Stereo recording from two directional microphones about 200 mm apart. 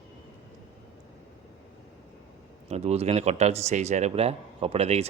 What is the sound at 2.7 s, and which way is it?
Speech, 30° right (ahead or behind).